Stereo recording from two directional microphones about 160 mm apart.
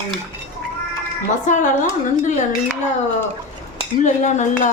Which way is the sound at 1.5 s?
50° left (ahead or behind).